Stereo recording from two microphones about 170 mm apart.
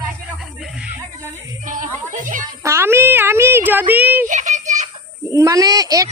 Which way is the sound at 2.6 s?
15° right (ahead or behind).